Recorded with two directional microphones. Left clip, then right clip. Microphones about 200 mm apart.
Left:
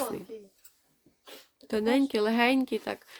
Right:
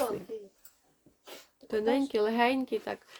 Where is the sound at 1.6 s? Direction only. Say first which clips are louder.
Left 2 dB; 40° left (ahead or behind).